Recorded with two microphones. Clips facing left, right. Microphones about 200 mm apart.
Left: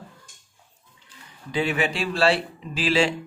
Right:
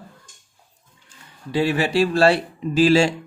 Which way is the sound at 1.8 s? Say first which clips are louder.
Right 6 dB; 40° right (ahead or behind).